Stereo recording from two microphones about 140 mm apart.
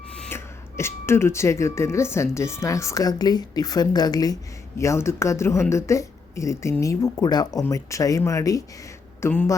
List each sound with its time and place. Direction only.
0.3 s speech: 20° left (ahead or behind)